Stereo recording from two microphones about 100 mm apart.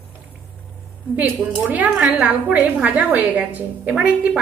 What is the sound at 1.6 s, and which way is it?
A woman's voice, 15° right (ahead or behind).